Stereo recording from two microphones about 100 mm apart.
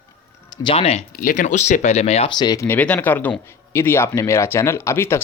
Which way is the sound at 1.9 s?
90° left.